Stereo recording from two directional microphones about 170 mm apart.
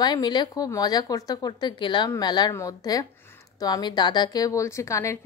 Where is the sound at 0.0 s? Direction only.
25° left (ahead or behind).